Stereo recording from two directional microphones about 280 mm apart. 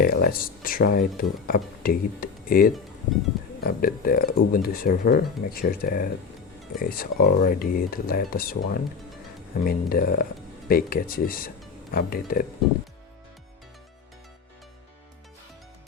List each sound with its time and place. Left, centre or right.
0.0 s speech: left